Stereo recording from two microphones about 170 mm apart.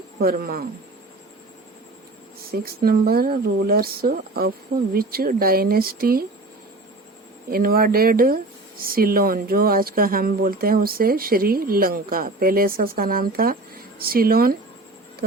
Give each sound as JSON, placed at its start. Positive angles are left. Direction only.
{"t": 0.2, "sound": "speech", "side_deg": -60}
{"t": 2.5, "sound": "speech", "side_deg": -60}
{"t": 7.5, "sound": "speech", "side_deg": -60}